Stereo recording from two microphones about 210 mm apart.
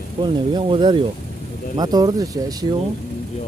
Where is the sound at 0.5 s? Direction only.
20° right (ahead or behind).